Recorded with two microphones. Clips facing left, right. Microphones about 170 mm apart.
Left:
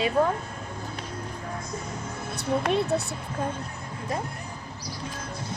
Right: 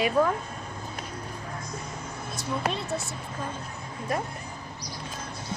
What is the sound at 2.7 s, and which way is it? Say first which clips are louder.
Speech: left 7 dB; 65° left (ahead or behind).